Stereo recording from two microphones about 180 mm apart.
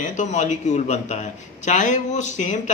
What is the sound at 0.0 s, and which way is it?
A man's voice, 45° left (ahead or behind).